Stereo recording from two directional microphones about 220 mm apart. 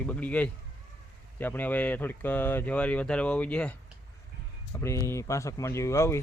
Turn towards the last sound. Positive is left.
turn(degrees=10)  # may be behind; listen again after turning